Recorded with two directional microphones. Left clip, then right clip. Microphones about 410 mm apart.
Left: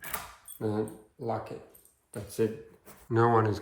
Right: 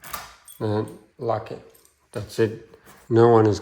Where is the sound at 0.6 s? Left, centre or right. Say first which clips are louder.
Right 6 dB; right.